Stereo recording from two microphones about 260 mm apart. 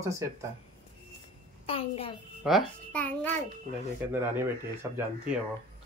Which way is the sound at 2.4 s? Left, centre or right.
Centre.